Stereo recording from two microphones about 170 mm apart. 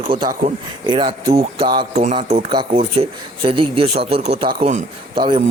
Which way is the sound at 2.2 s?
45° right (ahead or behind).